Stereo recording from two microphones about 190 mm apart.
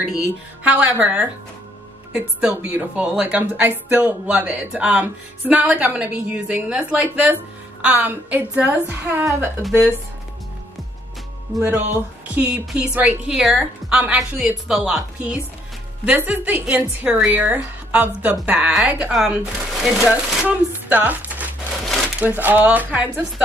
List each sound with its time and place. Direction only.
0.7 s a woman's voice: 10° right (ahead or behind)
9.6 s a woman's voice: centre (ahead or behind)
12.4 s a woman's voice: 5° right (ahead or behind)